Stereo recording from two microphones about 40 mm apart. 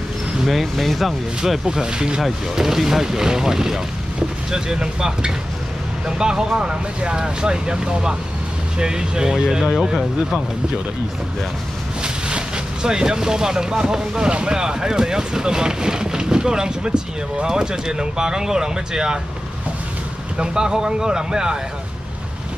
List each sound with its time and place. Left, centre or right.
0.5 s speech: centre
1.7 s speech: centre
12.0 s speech: right
20.3 s speech: centre